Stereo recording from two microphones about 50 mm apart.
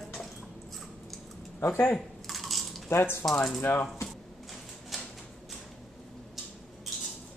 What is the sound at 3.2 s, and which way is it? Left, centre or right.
Speech, centre.